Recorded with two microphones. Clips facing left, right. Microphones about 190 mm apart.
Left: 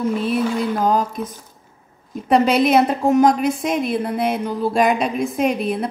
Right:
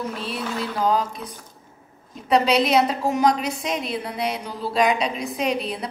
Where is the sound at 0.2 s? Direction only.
55° left (ahead or behind).